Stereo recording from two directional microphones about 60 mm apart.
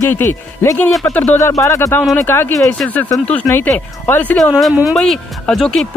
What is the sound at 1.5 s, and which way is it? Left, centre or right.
Speech, left.